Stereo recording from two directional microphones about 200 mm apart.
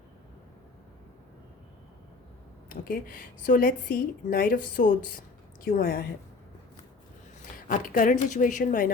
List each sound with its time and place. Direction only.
2.6 s a woman's voice: 45° left (ahead or behind)
7.5 s a woman's voice: 40° left (ahead or behind)